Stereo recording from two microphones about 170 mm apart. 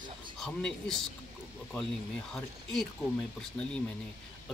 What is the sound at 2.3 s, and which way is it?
Speech, centre (ahead or behind).